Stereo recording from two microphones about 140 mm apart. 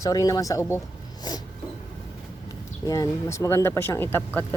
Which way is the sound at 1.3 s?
30° left (ahead or behind).